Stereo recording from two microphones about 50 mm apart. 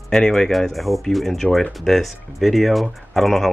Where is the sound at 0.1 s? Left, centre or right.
Centre.